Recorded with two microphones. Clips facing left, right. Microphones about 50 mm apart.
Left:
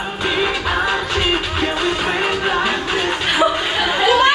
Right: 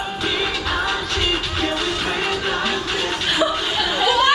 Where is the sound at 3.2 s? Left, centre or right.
Left.